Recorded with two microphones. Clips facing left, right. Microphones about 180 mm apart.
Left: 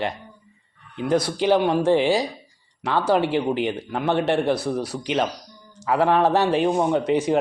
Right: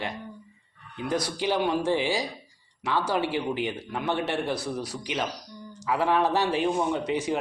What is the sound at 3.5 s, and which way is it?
Speech, 60° left (ahead or behind).